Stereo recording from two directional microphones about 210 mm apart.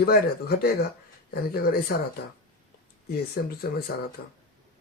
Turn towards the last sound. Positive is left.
turn(degrees=45)  # may be behind; listen again after turning